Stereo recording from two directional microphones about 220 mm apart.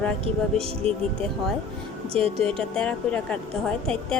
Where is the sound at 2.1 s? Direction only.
25° right (ahead or behind).